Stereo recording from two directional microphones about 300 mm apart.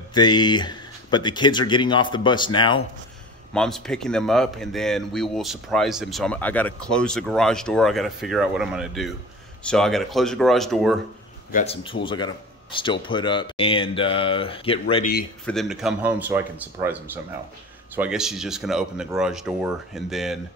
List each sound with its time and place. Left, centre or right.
0.1 s speech: centre
3.5 s speech: centre
11.5 s speech: centre
15.4 s speech: centre